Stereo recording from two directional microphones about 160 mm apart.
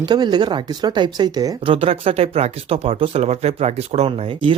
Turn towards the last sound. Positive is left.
turn(degrees=-30)  # may be behind; listen again after turning